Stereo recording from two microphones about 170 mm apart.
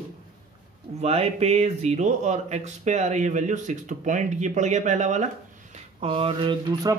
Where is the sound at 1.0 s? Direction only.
35° right (ahead or behind).